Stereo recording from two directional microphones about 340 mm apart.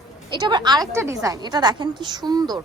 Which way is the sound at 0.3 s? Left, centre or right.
Centre.